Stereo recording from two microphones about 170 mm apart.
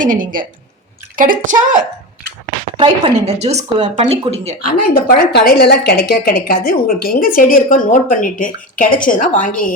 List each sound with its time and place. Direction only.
0.0 s speech: 55° right (ahead or behind)
2.7 s speech: 30° right (ahead or behind)
4.8 s a woman's voice: 60° left (ahead or behind)